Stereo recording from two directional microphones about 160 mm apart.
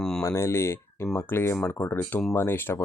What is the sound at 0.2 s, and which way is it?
Speech, 15° left (ahead or behind).